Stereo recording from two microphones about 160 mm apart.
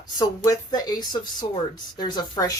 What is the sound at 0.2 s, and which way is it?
Speech, 25° left (ahead or behind).